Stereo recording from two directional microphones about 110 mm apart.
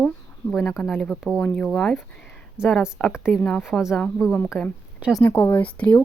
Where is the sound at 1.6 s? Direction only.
5° left (ahead or behind); by 5.2 s 10° right (ahead or behind).